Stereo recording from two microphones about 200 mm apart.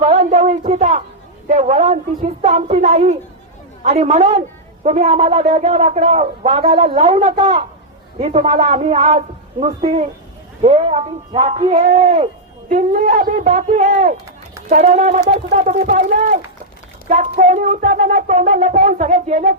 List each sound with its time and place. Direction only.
0.0 s a woman's voice: 35° right (ahead or behind)